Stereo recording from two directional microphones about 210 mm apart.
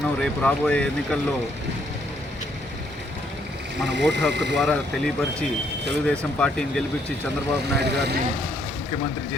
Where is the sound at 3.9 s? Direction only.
55° right (ahead or behind).